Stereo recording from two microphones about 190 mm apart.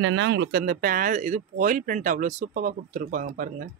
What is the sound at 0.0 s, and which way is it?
Speech, 80° right.